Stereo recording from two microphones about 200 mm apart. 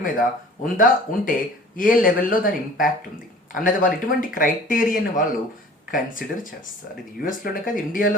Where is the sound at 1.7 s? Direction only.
45° left (ahead or behind).